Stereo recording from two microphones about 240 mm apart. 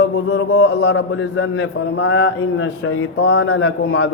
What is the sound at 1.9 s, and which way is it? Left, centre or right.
A man's voice, left.